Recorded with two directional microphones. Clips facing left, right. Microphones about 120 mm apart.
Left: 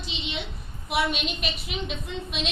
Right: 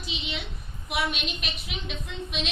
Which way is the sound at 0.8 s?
Centre (ahead or behind).